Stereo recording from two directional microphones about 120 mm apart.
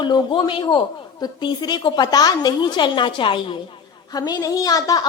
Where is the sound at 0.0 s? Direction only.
40° left (ahead or behind).